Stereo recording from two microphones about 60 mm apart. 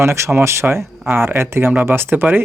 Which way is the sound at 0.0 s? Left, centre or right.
Right.